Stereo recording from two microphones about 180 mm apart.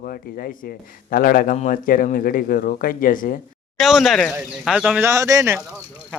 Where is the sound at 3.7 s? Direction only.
Centre (ahead or behind).